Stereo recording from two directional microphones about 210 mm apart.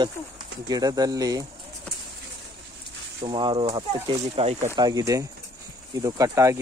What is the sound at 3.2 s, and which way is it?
Speech, 20° right (ahead or behind).